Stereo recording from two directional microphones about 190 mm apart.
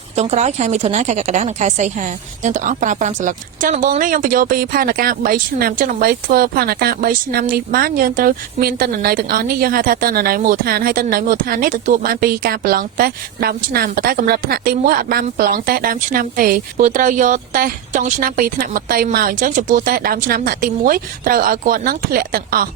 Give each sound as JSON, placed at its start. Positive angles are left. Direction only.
{"t": 0.2, "sound": "speech", "side_deg": -35}